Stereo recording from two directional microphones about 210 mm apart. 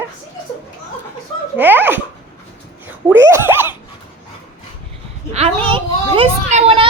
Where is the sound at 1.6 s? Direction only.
10° right (ahead or behind).